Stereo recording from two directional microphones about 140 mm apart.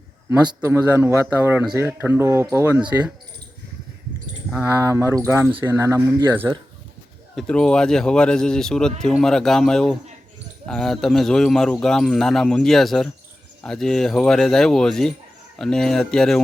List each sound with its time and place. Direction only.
0.3 s speech: 20° right (ahead or behind)
4.6 s speech: 20° right (ahead or behind)
7.3 s speech: 5° left (ahead or behind)